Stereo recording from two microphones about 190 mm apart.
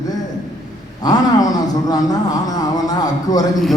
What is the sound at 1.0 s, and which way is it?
Speech, 20° left (ahead or behind).